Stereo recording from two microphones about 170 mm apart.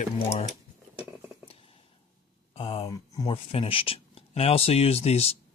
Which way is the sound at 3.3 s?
35° left (ahead or behind).